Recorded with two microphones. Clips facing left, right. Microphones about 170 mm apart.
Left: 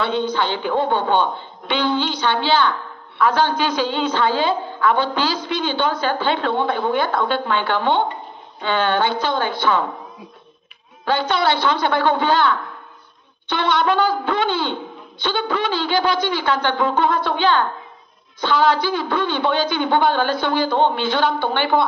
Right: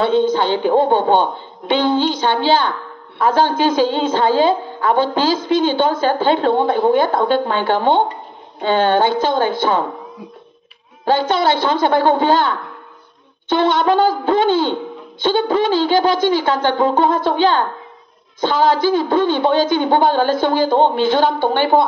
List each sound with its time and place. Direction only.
0.0 s a woman's voice: 45° right (ahead or behind)
11.1 s a woman's voice: 45° right (ahead or behind)